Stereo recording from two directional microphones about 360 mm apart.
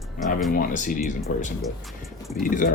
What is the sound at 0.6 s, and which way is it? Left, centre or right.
Speech, left.